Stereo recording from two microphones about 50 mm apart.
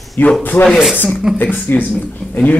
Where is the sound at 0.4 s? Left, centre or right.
Left.